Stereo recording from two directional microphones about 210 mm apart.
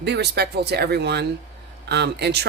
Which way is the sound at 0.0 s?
50° right (ahead or behind).